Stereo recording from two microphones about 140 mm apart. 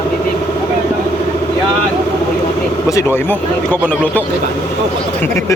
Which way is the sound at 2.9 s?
15° left (ahead or behind).